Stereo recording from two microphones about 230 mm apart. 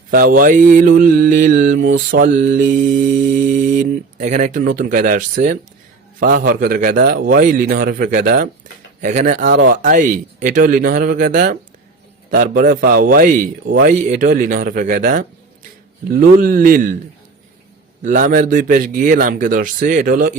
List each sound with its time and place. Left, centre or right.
0.1 s mantra: right
18.0 s mantra: right